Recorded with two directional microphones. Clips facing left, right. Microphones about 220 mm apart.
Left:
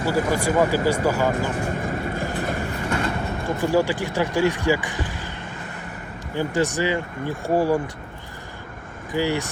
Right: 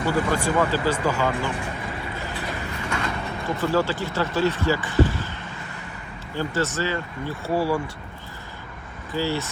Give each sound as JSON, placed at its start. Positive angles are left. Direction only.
{"t": 0.0, "sound": "speech", "side_deg": 40}
{"t": 0.3, "sound": "speech", "side_deg": 10}
{"t": 1.2, "sound": "vehicle", "side_deg": 45}
{"t": 3.4, "sound": "speech", "side_deg": 15}
{"t": 6.3, "sound": "speech", "side_deg": 15}
{"t": 9.1, "sound": "speech", "side_deg": 15}